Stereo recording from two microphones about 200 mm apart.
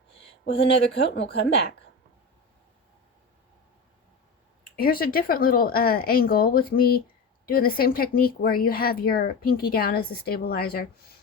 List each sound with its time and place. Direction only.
0.9 s speech: 60° left (ahead or behind)
4.8 s speech: 45° left (ahead or behind)